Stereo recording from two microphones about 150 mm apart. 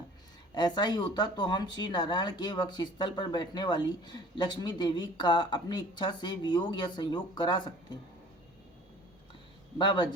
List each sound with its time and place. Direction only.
0.5 s speech: 30° left (ahead or behind)
9.7 s a man's voice: 30° left (ahead or behind)